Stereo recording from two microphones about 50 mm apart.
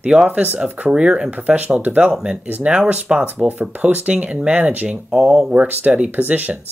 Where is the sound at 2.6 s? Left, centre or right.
Right.